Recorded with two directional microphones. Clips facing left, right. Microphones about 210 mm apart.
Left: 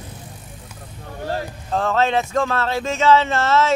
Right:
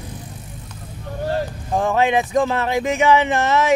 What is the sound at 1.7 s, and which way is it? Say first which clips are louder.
Speech: right 1 dB; 15° right (ahead or behind).